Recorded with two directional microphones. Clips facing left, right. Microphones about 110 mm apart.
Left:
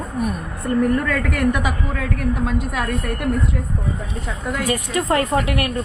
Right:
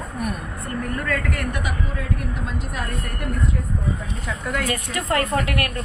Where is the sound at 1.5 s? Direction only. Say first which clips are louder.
Left 6 dB; 90° left.